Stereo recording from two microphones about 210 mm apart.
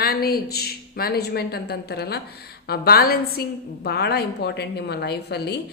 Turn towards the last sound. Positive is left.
turn(degrees=50)  # may be behind; listen again after turning